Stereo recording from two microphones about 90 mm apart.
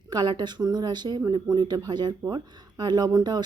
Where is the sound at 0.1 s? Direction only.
55° right (ahead or behind).